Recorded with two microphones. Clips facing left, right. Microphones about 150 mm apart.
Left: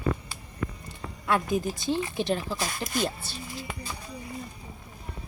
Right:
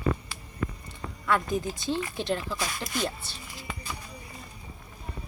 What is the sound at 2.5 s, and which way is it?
Speech, 35° left (ahead or behind).